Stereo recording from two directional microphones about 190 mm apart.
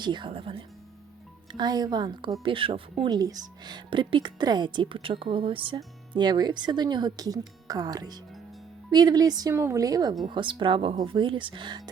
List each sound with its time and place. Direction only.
0.0 s a woman's voice: 25° right (ahead or behind)